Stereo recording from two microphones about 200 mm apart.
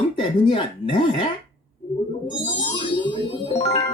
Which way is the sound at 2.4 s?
25° left (ahead or behind).